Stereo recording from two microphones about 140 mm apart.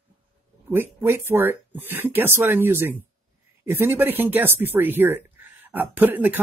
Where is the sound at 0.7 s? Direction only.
15° right (ahead or behind).